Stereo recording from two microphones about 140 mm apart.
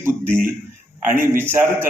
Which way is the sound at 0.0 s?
15° right (ahead or behind).